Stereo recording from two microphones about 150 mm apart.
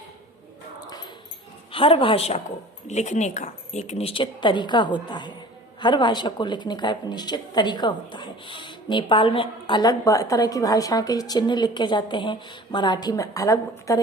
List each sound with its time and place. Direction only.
1.7 s a woman's voice: 35° left (ahead or behind); by 14.0 s 20° left (ahead or behind)